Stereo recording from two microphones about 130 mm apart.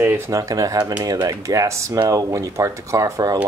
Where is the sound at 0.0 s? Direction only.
20° right (ahead or behind).